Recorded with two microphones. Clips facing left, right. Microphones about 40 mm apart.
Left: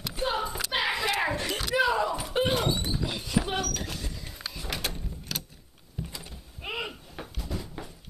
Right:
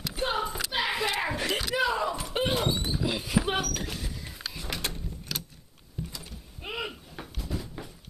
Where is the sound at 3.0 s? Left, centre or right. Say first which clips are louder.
Right 4 dB; centre.